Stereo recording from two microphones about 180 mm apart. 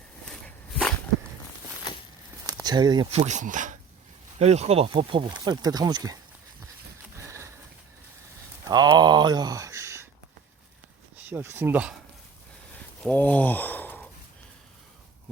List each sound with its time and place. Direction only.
0.3 s walk: 5° left (ahead or behind)
2.5 s speech: 20° right (ahead or behind)
3.1 s speech: 40° right (ahead or behind); by 6.1 s 20° right (ahead or behind)
7.2 s sniff: 15° right (ahead or behind)
8.6 s speech: 20° right (ahead or behind)
11.2 s speech: 10° right (ahead or behind)
13.0 s a sound: 10° left (ahead or behind)